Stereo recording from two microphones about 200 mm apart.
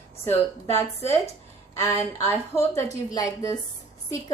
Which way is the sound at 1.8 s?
15° left (ahead or behind).